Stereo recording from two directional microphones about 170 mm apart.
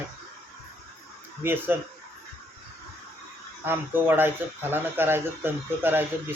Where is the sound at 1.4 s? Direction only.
10° right (ahead or behind).